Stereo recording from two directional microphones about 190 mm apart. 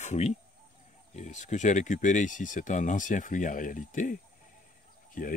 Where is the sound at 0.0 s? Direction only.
40° left (ahead or behind).